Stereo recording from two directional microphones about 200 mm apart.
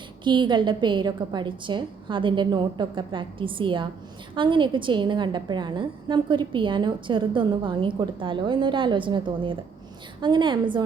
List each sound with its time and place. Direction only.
0.3 s a woman's voice: 25° right (ahead or behind)